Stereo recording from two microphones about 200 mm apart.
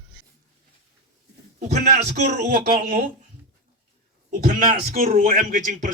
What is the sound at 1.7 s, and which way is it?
A man's voice, 55° right (ahead or behind).